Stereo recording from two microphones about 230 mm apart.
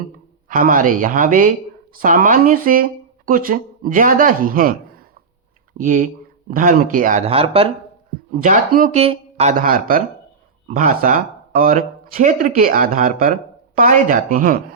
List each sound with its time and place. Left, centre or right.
0.4 s speech: right
8.3 s speech: right